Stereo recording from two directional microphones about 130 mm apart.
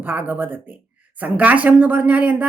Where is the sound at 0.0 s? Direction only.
15° right (ahead or behind).